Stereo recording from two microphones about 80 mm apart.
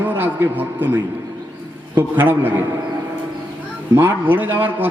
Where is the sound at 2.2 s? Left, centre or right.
Right.